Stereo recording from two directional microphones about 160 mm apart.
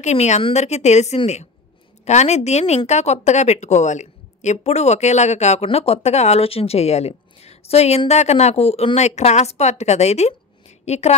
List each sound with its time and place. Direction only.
0.0 s a woman's voice: 45° left (ahead or behind)